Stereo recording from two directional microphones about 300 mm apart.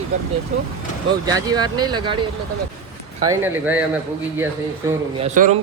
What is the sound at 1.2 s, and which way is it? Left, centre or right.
Speech, centre.